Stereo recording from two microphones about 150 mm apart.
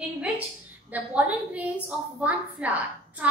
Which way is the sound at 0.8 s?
10° right (ahead or behind).